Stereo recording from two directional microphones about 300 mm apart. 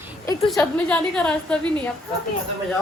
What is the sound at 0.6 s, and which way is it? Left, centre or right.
A woman's voice, centre.